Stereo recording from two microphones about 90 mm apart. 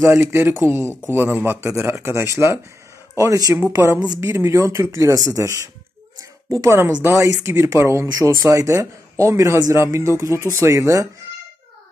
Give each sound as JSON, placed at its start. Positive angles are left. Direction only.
{"t": 0.0, "sound": "a man's voice", "side_deg": -30}
{"t": 3.5, "sound": "a man's voice", "side_deg": -25}